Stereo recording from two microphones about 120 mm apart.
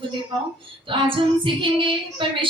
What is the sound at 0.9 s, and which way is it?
A woman's voice, 45° right (ahead or behind).